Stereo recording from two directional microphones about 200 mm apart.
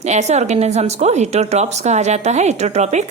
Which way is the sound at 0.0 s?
35° right (ahead or behind).